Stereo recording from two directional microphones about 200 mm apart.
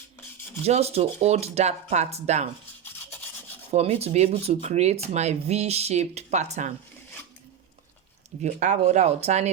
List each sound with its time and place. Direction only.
0.6 s speech: 30° right (ahead or behind)
3.7 s speech: 30° right (ahead or behind)
8.4 s speech: 35° right (ahead or behind)